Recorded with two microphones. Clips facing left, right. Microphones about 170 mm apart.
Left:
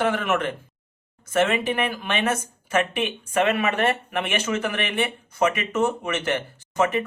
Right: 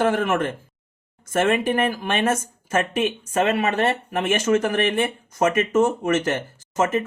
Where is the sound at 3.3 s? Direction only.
30° right (ahead or behind).